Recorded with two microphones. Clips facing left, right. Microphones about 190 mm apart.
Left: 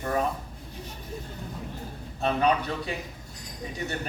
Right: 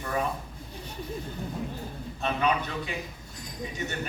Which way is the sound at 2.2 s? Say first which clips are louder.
Left 3 dB; 35° left (ahead or behind).